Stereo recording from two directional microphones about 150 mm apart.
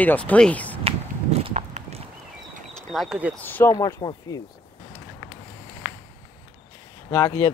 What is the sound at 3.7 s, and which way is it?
Speech, 25° left (ahead or behind).